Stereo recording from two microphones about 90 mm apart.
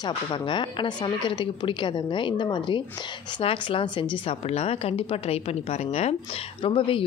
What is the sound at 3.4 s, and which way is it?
Speech, 85° left.